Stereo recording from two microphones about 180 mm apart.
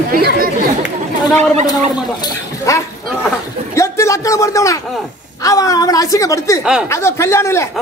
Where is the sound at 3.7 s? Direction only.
15° left (ahead or behind).